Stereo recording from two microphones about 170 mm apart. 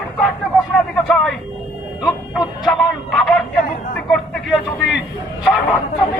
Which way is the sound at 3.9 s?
Centre (ahead or behind).